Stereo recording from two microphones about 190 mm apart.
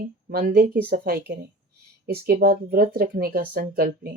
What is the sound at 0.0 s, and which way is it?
Speech, 50° right (ahead or behind).